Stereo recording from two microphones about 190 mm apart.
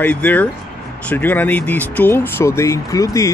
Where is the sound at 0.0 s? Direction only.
10° left (ahead or behind).